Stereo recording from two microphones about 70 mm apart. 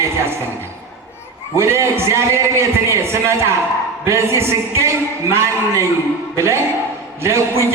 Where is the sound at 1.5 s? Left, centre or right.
Right.